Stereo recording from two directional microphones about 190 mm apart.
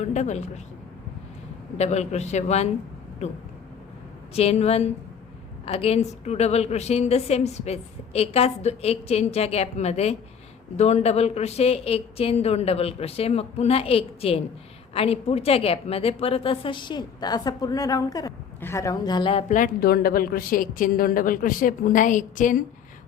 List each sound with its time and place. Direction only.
0.0 s a woman's voice: 35° left (ahead or behind)
1.8 s a woman's voice: 35° left (ahead or behind)
4.4 s a woman's voice: 35° left (ahead or behind)